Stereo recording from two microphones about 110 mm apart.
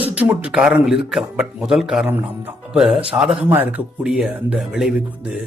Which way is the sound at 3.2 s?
5° right (ahead or behind).